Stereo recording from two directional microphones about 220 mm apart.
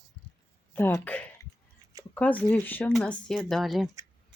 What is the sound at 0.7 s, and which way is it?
Speech, 10° left (ahead or behind).